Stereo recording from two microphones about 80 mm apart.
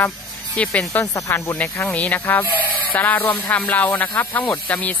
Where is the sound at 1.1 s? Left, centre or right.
Left.